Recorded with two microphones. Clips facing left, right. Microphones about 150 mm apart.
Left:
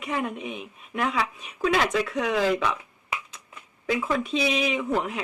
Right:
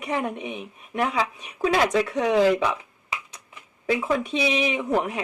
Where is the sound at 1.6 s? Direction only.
35° right (ahead or behind).